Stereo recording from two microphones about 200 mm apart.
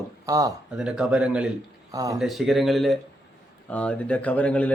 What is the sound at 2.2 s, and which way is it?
Speech, centre (ahead or behind).